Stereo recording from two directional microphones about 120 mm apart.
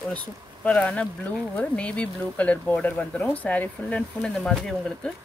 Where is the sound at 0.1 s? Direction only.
10° left (ahead or behind).